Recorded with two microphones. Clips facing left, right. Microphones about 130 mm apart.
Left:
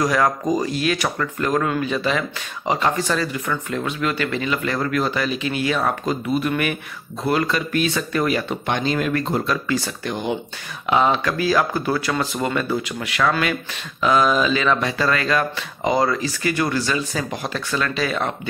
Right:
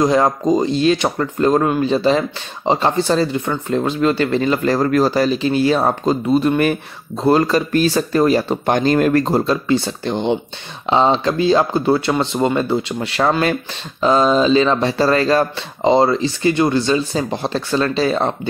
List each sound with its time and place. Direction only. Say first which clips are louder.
0.0 s speech: right 5 dB; 25° right (ahead or behind)